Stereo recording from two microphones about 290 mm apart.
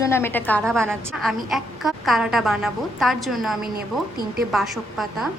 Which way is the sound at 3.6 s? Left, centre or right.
Right.